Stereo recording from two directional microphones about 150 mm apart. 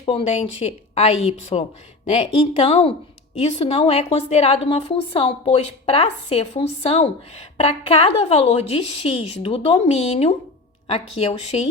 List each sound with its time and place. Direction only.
0.0 s a woman's voice: 40° left (ahead or behind)